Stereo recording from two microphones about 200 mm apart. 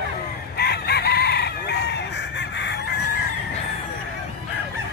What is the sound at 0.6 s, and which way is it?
Chicken, 55° left (ahead or behind).